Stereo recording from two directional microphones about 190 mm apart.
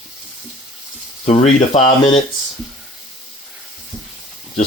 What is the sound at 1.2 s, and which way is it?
Speech, 35° left (ahead or behind).